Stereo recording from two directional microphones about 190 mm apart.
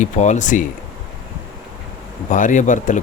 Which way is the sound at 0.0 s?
40° left (ahead or behind).